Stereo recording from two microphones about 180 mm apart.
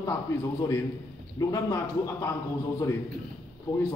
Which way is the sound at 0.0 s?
20° left (ahead or behind).